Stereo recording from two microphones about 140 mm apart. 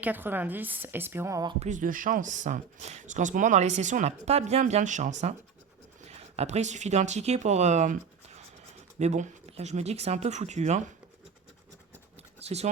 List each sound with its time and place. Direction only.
0.0 s a woman's voice: 15° right (ahead or behind)
1.5 s speech: 60° right (ahead or behind)
6.1 s speech: 50° right (ahead or behind)
9.0 s speech: 55° right (ahead or behind)
12.4 s a sound: 50° right (ahead or behind)